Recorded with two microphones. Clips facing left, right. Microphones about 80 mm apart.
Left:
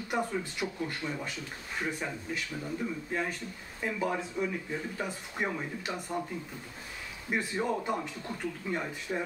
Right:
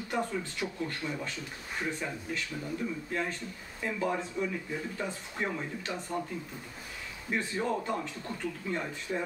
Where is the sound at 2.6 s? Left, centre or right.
Centre.